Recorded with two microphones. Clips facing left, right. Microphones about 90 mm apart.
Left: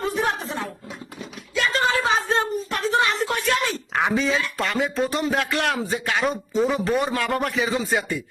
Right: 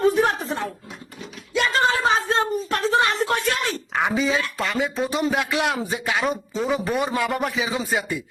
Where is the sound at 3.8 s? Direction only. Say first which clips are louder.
Right 1 dB; centre (ahead or behind).